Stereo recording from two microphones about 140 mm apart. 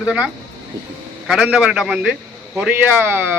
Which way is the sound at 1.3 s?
5° right (ahead or behind).